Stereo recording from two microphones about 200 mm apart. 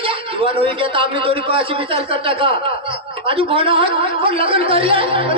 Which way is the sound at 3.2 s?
25° right (ahead or behind).